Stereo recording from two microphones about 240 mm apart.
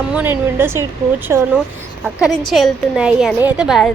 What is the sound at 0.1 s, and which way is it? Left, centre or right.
A woman's voice, centre.